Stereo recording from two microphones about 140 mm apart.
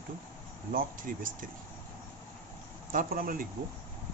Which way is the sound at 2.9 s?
85° right.